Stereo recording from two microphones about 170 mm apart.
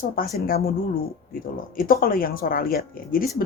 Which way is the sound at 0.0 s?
60° left (ahead or behind).